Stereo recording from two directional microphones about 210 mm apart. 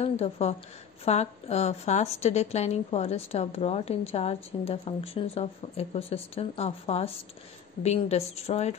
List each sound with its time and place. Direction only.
0.0 s a woman's voice: 30° left (ahead or behind)